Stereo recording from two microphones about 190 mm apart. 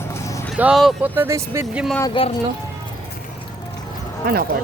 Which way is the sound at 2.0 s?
25° left (ahead or behind).